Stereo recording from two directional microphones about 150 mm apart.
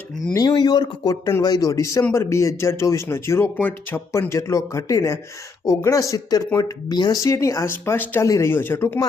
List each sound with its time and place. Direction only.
0.3 s speech: 25° left (ahead or behind)